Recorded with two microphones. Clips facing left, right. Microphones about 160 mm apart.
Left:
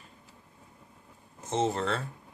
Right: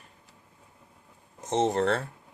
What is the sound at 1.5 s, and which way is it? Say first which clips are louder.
Speech: right 4 dB; 70° right (ahead or behind).